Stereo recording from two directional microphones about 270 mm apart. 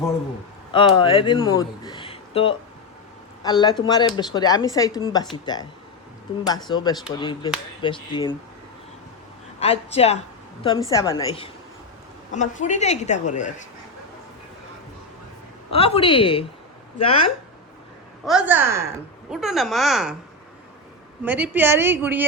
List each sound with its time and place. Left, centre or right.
0.7 s speech: centre
6.7 s speech: centre
9.6 s a woman's voice: left
15.7 s a woman's voice: left
18.3 s a woman's voice: centre
21.2 s a woman's voice: centre